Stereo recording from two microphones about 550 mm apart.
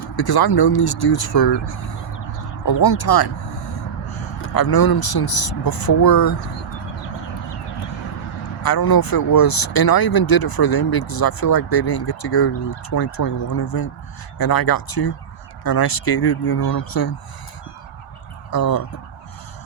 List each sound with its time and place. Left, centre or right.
0.2 s speech: left
4.5 s speech: left
8.6 s speech: left
18.5 s speech: left